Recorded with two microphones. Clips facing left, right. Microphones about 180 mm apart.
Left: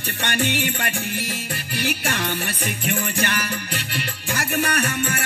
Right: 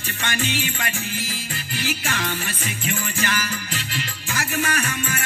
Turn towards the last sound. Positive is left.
turn(degrees=65)  # may be behind; listen again after turning